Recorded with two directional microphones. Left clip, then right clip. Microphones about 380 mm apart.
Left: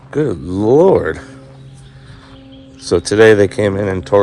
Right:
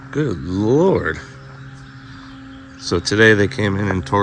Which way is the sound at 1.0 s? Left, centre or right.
Centre.